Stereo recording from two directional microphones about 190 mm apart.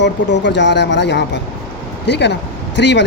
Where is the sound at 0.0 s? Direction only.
70° left (ahead or behind).